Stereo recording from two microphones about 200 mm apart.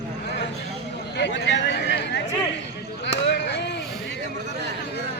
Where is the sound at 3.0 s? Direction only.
55° left (ahead or behind).